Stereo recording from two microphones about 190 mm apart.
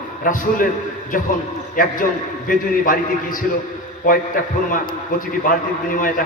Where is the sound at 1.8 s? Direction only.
45° left (ahead or behind).